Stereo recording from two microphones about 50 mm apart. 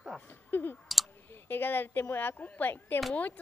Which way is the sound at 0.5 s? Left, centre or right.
Left.